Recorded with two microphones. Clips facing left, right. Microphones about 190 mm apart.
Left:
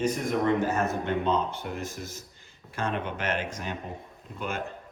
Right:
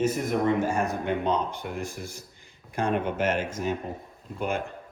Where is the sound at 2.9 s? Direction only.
50° right (ahead or behind).